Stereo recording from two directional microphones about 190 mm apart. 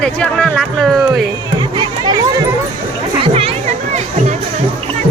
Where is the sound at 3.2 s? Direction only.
30° right (ahead or behind).